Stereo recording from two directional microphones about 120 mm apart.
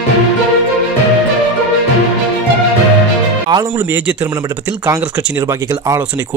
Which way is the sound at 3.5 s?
25° right (ahead or behind).